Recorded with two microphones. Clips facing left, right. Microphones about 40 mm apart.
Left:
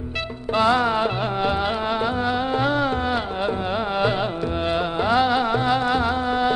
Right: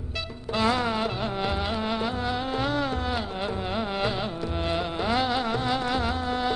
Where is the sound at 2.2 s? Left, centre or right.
Centre.